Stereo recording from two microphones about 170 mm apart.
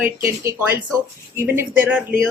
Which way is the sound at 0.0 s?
15° right (ahead or behind).